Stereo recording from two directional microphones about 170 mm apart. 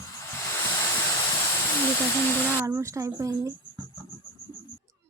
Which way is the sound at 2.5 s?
15° right (ahead or behind).